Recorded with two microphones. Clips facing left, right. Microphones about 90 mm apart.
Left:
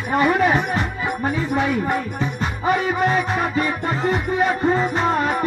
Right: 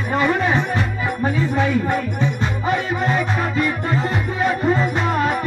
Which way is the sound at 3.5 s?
25° left (ahead or behind).